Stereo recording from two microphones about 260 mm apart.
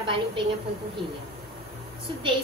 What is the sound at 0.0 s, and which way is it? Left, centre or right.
Speech, centre.